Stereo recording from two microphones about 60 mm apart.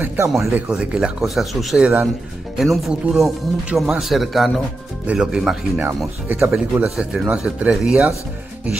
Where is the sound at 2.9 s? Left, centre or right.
Centre.